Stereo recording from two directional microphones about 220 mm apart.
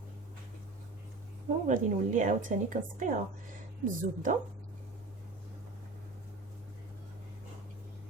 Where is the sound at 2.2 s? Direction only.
35° right (ahead or behind).